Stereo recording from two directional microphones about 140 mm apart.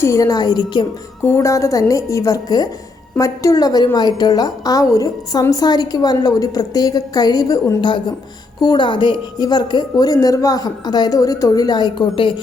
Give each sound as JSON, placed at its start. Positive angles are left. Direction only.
{"t": 0.0, "sound": "a woman's voice", "side_deg": 20}
{"t": 1.2, "sound": "a woman's voice", "side_deg": 20}